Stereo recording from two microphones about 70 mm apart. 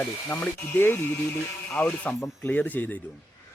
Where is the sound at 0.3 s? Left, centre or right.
Left.